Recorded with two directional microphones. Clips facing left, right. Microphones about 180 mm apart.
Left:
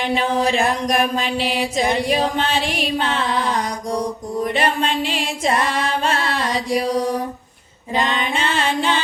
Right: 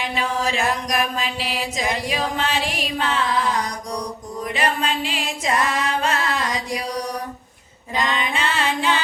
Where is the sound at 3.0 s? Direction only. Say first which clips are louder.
Right 3 dB; 30° left (ahead or behind).